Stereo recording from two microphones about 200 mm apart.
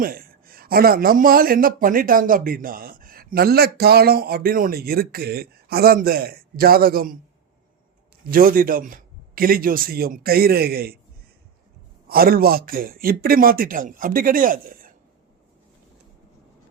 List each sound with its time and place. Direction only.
0.0 s a man's voice: 45° right (ahead or behind)
8.3 s a man's voice: 45° right (ahead or behind)
12.0 s a man's voice: 50° right (ahead or behind)